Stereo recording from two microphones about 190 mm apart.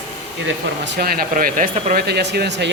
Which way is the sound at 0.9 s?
50° right (ahead or behind).